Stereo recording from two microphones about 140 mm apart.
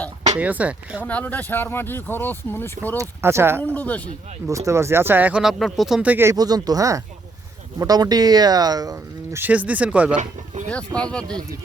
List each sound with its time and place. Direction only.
0.3 s speech: 10° right (ahead or behind)
1.0 s speech: 10° left (ahead or behind)
3.0 s speech: 20° right (ahead or behind)
3.8 s speech: 10° left (ahead or behind)
4.4 s speech: 20° right (ahead or behind)
6.3 s speech: 30° right (ahead or behind)
9.4 s speech: 10° right (ahead or behind)
10.2 s speech: 60° right (ahead or behind)
10.9 s speech: 5° left (ahead or behind)